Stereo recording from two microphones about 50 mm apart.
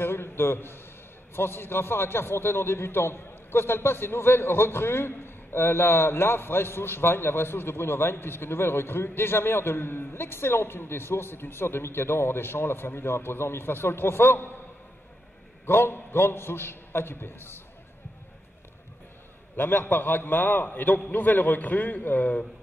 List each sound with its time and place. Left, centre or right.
0.0 s a sound: left
1.3 s a man's voice: left
15.6 s a man's voice: left
19.5 s a man's voice: left